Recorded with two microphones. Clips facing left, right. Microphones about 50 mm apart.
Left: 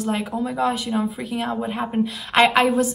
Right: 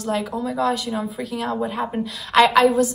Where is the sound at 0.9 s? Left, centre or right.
Centre.